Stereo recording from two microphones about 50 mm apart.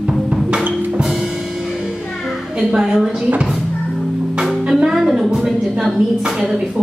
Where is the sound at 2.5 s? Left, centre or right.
Right.